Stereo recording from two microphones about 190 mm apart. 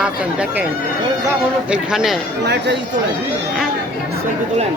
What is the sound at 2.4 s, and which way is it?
Speech, 65° right (ahead or behind).